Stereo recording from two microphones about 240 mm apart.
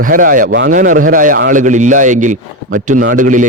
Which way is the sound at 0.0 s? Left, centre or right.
Right.